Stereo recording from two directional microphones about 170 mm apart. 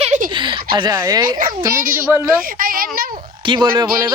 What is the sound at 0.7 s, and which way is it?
Speech, 25° right (ahead or behind).